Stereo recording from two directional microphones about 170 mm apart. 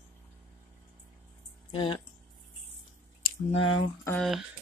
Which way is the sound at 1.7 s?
30° left (ahead or behind).